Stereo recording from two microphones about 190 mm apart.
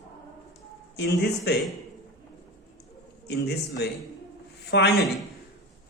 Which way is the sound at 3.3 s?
60° left (ahead or behind).